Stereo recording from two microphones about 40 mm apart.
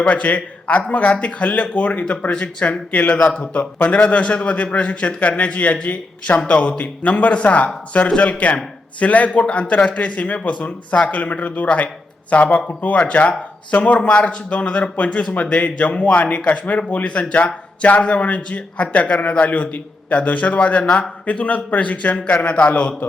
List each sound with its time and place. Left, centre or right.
0.1 s a man's voice: left
20.8 s a man's voice: left